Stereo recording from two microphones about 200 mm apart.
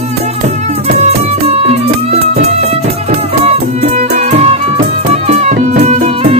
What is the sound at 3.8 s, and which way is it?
Music, 30° right (ahead or behind).